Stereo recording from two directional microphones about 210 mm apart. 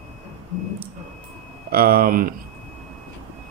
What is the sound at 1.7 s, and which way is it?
Speech, 45° right (ahead or behind).